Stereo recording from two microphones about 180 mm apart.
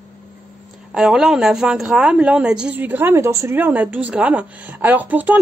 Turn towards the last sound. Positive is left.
turn(degrees=-10)  # may be behind; listen again after turning